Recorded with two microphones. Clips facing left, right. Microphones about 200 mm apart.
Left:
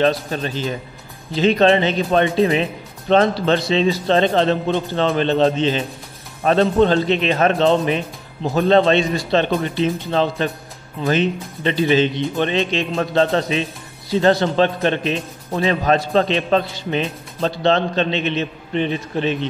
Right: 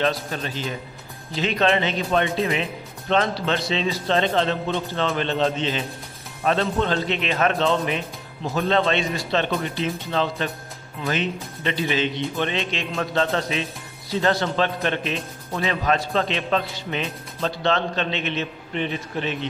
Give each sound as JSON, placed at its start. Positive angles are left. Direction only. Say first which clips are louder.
{"t": 0.0, "sound": "speech", "louder": "left 6 dB", "side_deg": 35}